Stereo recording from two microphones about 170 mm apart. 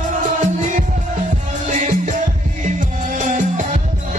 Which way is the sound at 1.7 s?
45° right (ahead or behind).